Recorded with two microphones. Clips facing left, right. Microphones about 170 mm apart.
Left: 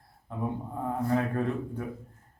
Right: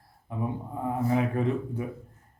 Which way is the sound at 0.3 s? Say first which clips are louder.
Right 1 dB; 5° right (ahead or behind).